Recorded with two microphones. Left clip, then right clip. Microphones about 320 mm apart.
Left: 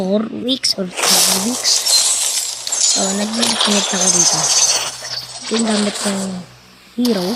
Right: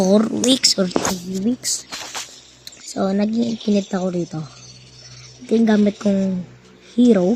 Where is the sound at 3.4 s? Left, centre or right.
Left.